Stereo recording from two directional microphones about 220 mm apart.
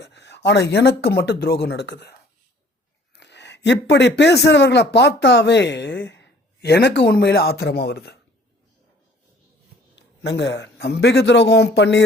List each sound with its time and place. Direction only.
0.0 s a man's voice: 50° left (ahead or behind)
3.2 s a man's voice: 50° left (ahead or behind)
9.9 s a man's voice: 50° left (ahead or behind)